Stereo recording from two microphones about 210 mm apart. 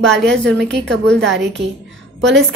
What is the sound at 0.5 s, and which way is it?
Speech, 55° right (ahead or behind).